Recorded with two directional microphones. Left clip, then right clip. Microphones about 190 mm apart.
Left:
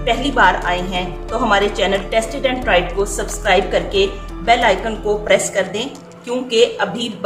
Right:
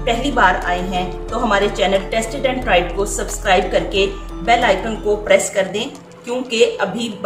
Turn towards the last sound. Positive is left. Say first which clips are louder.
# left 1 dB
turn(degrees=15)  # may be behind; listen again after turning